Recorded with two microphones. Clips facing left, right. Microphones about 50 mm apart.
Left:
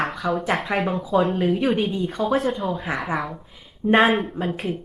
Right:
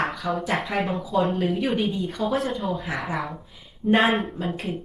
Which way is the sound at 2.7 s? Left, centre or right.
Centre.